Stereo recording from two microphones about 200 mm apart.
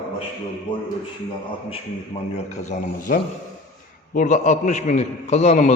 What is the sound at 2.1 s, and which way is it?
A man's voice, 30° left (ahead or behind).